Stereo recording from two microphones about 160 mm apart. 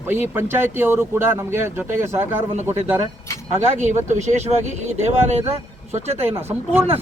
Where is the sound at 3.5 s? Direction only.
45° right (ahead or behind).